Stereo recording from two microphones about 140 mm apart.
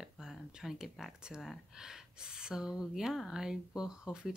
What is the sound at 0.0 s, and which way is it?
Speech, 5° right (ahead or behind).